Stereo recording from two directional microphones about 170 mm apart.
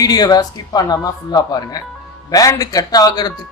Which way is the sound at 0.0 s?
20° left (ahead or behind).